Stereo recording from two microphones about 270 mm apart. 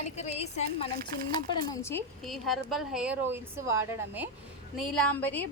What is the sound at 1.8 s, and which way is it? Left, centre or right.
A woman's voice, centre.